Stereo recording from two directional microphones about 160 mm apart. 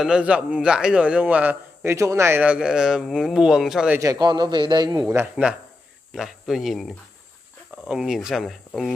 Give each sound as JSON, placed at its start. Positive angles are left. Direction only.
{"t": 0.0, "sound": "a man's voice", "side_deg": -5}
{"t": 4.0, "sound": "a man's voice", "side_deg": -25}
{"t": 5.3, "sound": "a man's voice", "side_deg": -5}